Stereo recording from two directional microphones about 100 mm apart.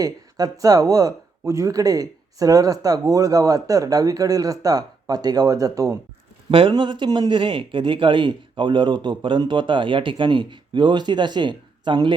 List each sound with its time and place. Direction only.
0.0 s speech: 40° right (ahead or behind)
6.5 s a man's voice: 60° right (ahead or behind)